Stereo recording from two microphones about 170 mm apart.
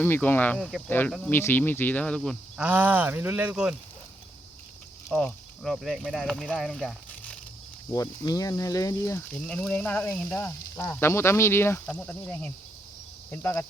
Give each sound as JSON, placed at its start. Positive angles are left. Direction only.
{"t": 0.0, "sound": "speech", "side_deg": 10}
{"t": 2.6, "sound": "speech", "side_deg": -10}
{"t": 5.0, "sound": "speech", "side_deg": 5}
{"t": 7.9, "sound": "speech", "side_deg": 20}
{"t": 9.3, "sound": "speech", "side_deg": 5}